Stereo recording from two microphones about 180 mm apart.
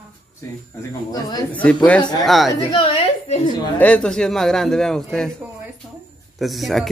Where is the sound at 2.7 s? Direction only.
30° left (ahead or behind).